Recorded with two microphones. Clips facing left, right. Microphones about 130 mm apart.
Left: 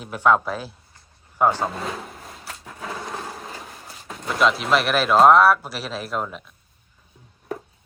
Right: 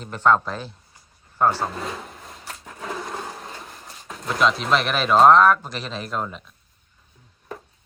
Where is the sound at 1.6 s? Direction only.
Centre (ahead or behind).